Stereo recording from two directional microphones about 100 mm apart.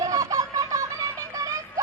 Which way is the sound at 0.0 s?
35° right (ahead or behind).